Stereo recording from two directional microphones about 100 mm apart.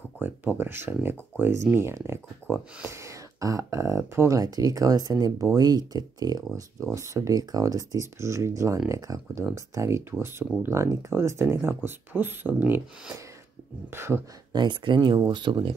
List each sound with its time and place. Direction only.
0.2 s speech: 20° right (ahead or behind)
13.8 s speech: 25° right (ahead or behind)
14.5 s speech: 50° right (ahead or behind)